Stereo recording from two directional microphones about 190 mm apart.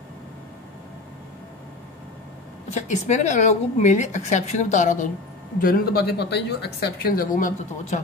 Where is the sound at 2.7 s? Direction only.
40° left (ahead or behind).